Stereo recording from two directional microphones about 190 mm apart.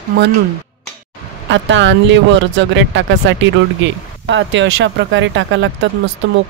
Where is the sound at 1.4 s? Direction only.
75° right (ahead or behind).